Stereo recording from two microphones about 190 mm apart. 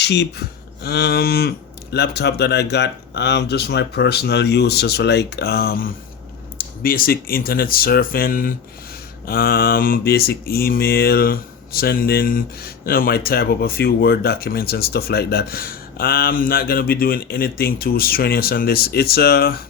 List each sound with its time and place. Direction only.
0.0 s speech: 60° left (ahead or behind)
6.6 s mantra: 50° left (ahead or behind)